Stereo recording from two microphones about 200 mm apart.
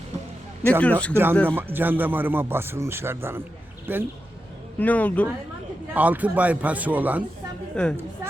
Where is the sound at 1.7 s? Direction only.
10° right (ahead or behind).